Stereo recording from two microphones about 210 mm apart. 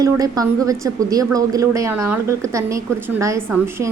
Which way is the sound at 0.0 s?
15° right (ahead or behind).